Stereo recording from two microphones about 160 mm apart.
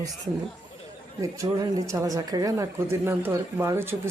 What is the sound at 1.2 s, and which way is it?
Speech, 25° right (ahead or behind).